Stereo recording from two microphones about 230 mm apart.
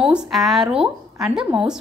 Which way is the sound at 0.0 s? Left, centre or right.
Centre.